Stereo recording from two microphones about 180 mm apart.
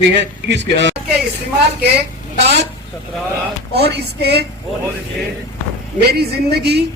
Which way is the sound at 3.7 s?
65° right (ahead or behind).